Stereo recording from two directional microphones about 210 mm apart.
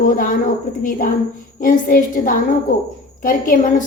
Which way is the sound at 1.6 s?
40° left (ahead or behind).